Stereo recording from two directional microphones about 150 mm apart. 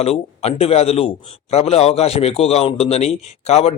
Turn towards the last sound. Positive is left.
turn(degrees=45)  # may be behind; listen again after turning